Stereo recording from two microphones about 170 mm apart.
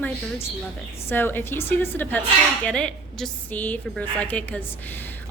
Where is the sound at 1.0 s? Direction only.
10° left (ahead or behind).